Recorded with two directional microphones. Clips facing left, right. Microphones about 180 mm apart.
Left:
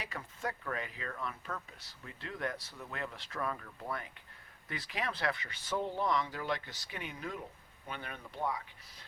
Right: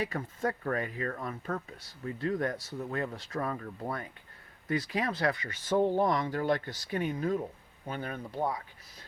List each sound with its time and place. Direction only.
0.2 s speech: 45° right (ahead or behind)